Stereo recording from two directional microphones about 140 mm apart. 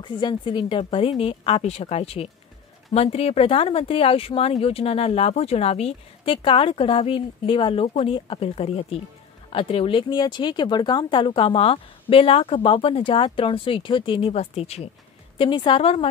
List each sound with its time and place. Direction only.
0.0 s speech: 35° left (ahead or behind)
15.3 s speech: 35° left (ahead or behind)